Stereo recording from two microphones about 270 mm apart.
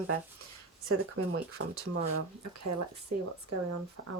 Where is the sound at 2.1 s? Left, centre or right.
Right.